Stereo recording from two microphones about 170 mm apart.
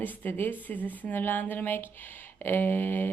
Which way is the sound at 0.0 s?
10° left (ahead or behind).